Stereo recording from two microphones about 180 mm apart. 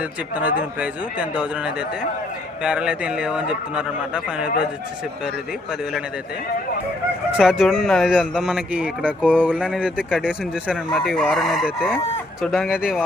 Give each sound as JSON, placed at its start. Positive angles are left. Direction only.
{"t": 0.0, "sound": "a man's voice", "side_deg": -10}
{"t": 7.3, "sound": "speech", "side_deg": 0}